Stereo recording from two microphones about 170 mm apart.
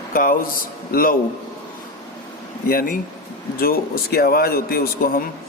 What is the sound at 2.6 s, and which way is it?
Speech, 60° left (ahead or behind).